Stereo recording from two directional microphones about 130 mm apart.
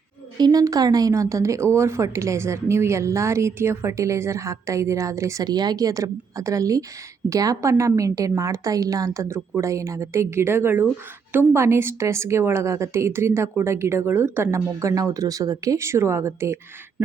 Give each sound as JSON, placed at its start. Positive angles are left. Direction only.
{"t": 0.3, "sound": "speech", "side_deg": -30}